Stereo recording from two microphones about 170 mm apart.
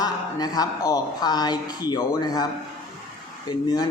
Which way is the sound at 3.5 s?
25° left (ahead or behind).